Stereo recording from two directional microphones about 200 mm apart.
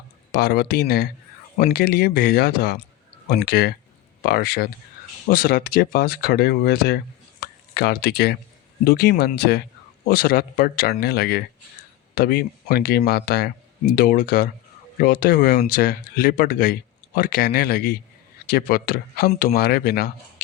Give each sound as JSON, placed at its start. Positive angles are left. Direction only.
{"t": 0.3, "sound": "speech", "side_deg": 50}